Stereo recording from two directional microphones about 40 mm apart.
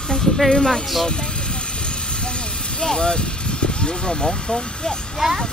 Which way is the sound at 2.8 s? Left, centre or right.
Centre.